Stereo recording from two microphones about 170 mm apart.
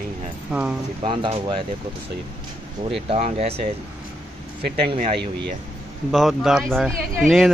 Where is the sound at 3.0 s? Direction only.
40° right (ahead or behind).